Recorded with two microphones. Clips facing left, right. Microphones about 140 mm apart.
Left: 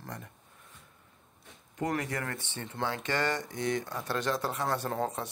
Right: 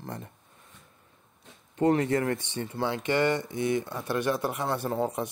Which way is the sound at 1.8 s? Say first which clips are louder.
Right 9 dB; 30° right (ahead or behind).